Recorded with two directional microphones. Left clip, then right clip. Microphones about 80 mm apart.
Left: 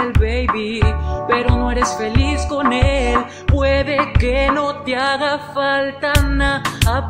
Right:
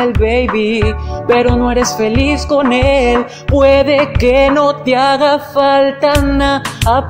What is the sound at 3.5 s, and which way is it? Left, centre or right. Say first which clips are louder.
Music: right 8 dB; right.